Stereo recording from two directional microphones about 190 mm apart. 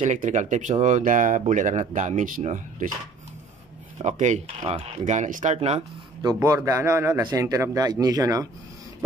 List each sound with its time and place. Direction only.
0.0 s speech: 40° right (ahead or behind)
4.0 s speech: 40° right (ahead or behind)
6.2 s speech: 15° right (ahead or behind)